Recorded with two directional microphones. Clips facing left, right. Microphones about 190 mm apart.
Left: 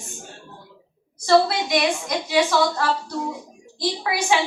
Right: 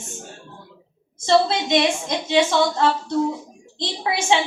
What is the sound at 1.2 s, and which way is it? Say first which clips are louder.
Speech: even; 25° right (ahead or behind).